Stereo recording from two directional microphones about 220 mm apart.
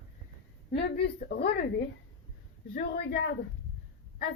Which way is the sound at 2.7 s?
45° left (ahead or behind).